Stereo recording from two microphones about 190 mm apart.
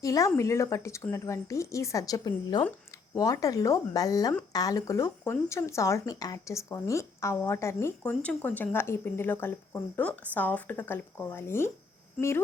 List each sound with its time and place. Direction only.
0.0 s speech: 15° left (ahead or behind)